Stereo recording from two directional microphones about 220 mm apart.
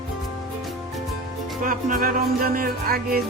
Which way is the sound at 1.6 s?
40° right (ahead or behind).